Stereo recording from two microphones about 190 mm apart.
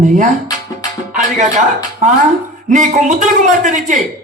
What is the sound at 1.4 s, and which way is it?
A man's voice, 40° right (ahead or behind).